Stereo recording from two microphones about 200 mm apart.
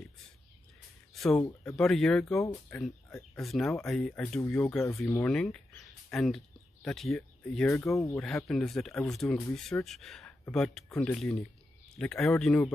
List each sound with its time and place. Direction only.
1.1 s a sound: centre (ahead or behind)
1.8 s speech: centre (ahead or behind)
7.8 s speech: 15° left (ahead or behind)
8.2 s speech: centre (ahead or behind)